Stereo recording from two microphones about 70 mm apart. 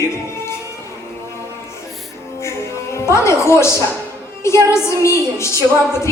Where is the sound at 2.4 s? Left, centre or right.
Left.